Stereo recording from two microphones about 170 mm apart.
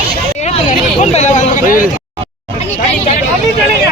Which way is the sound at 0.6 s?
45° left (ahead or behind).